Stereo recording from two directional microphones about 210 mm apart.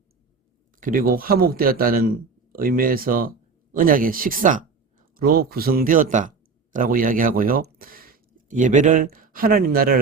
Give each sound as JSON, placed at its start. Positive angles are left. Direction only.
{"t": 0.8, "sound": "a man's voice", "side_deg": -40}